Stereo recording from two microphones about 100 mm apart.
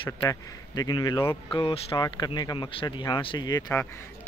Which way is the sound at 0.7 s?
40° left (ahead or behind).